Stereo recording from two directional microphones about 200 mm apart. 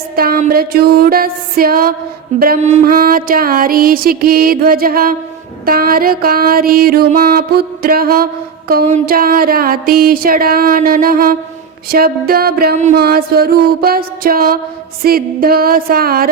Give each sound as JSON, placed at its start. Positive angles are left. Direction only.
{"t": 0.2, "sound": "music", "side_deg": -50}